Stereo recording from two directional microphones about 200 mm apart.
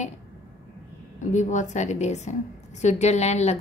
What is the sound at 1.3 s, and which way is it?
A woman's voice, 35° left (ahead or behind).